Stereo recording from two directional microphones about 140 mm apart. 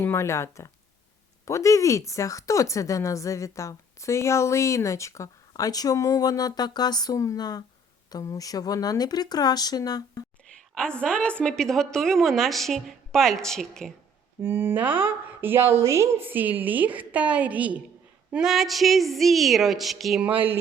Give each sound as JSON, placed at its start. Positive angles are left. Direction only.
{"t": 0.0, "sound": "speech", "side_deg": 20}
{"t": 10.8, "sound": "a woman's voice", "side_deg": 5}
{"t": 14.4, "sound": "a woman's voice", "side_deg": -15}